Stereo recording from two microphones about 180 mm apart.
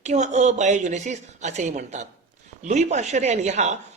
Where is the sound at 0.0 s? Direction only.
40° right (ahead or behind).